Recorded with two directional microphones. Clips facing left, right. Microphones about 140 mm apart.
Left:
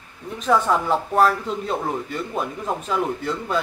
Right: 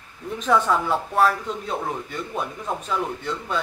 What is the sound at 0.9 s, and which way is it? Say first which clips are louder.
A man's voice: left 4 dB; centre (ahead or behind).